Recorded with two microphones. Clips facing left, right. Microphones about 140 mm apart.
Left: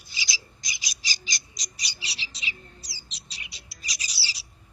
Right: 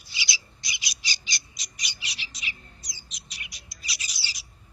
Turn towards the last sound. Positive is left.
turn(degrees=35)  # may be behind; listen again after turning